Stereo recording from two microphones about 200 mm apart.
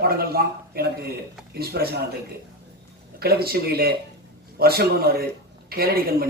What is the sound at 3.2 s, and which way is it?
A woman's voice, 50° right (ahead or behind).